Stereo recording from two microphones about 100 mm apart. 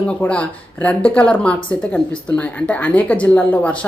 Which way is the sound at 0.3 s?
15° left (ahead or behind).